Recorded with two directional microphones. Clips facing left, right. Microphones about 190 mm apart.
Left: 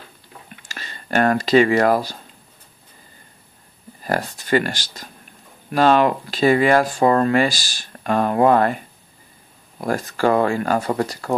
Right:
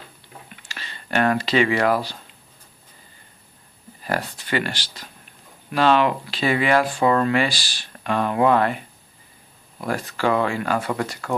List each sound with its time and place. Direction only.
0.6 s speech: 45° left (ahead or behind)
4.0 s speech: 40° left (ahead or behind)